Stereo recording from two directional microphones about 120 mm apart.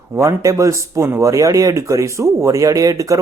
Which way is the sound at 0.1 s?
25° right (ahead or behind).